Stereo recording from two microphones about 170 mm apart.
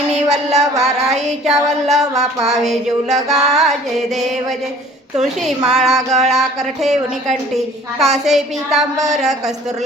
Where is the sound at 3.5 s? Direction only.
Centre (ahead or behind).